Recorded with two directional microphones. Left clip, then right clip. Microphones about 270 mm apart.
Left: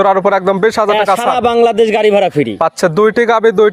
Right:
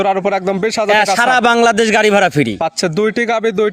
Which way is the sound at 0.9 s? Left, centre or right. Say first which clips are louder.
Even; right.